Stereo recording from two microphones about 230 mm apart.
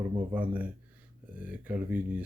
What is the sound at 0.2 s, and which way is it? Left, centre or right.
Speech, centre.